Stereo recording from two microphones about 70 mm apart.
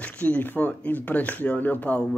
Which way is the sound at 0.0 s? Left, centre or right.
Left.